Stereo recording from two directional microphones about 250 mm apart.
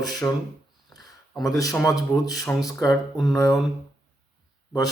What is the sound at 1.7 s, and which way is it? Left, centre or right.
A man's voice, centre.